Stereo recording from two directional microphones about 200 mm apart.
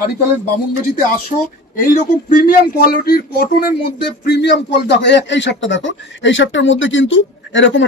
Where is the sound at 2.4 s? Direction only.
45° left (ahead or behind).